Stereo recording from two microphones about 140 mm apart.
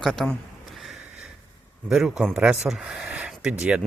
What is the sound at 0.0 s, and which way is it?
Speech, centre (ahead or behind).